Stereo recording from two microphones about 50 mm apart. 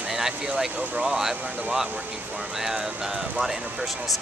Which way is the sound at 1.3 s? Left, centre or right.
Right.